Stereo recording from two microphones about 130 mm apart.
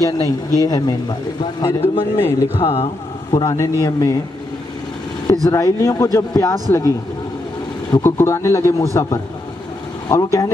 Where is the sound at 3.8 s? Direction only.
30° left (ahead or behind).